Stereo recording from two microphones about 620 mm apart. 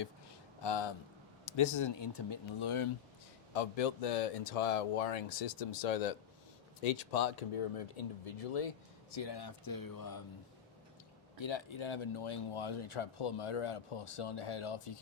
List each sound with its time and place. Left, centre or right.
0.6 s speech: left
3.5 s speech: left
9.1 s speech: left
11.3 s speech: left